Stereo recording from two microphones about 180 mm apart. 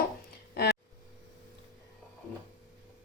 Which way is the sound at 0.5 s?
65° left (ahead or behind).